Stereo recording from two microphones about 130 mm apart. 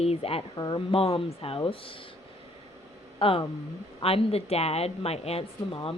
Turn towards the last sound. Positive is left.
turn(degrees=50)  # may be behind; listen again after turning